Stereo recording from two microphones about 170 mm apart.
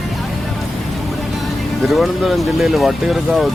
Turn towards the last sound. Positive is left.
turn(degrees=0)  # may be behind; listen again after turning